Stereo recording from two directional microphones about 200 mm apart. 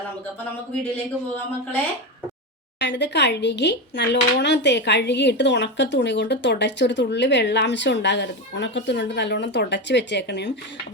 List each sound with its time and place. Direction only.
2.7 s speech: 60° left (ahead or behind)